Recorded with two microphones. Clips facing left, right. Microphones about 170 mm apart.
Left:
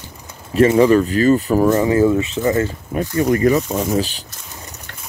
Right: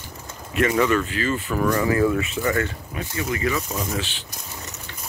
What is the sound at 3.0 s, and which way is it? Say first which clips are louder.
Speech: left 11 dB; 45° left (ahead or behind).